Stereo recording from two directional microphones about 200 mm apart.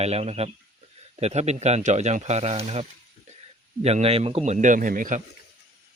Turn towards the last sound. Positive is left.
turn(degrees=-40)  # may be behind; listen again after turning